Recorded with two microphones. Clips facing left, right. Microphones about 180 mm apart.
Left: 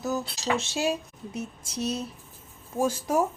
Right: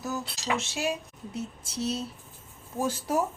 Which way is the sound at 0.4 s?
35° left (ahead or behind).